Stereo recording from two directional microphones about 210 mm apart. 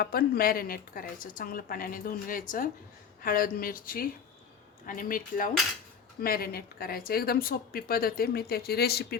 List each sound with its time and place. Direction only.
0.0 s speech: 45° left (ahead or behind)